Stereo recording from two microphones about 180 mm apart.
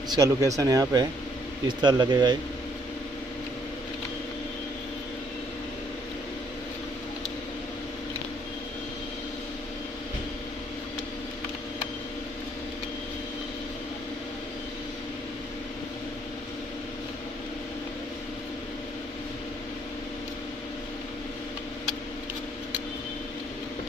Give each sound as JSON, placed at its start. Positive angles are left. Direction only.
{"t": 0.1, "sound": "speech", "side_deg": -20}